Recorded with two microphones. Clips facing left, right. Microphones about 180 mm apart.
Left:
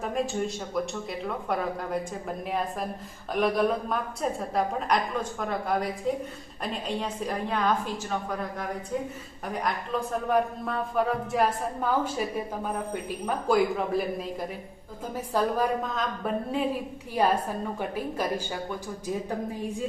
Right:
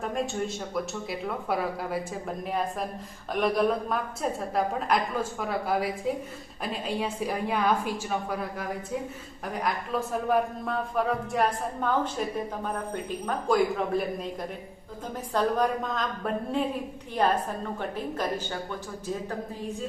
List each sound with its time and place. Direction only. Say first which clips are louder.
0.0 s a woman's voice: left 1 dB; centre (ahead or behind)
15.3 s a woman's voice: even; 5° left (ahead or behind)